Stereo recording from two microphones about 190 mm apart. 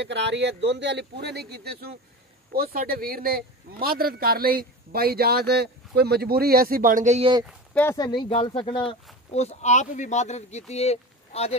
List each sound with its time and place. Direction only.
0.0 s a man's voice: 65° right (ahead or behind); by 7.2 s 40° right (ahead or behind)
7.7 s speech: 15° left (ahead or behind); by 11.5 s 35° left (ahead or behind)